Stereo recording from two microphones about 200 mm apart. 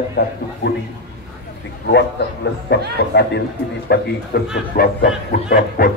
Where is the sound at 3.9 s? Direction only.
55° left (ahead or behind).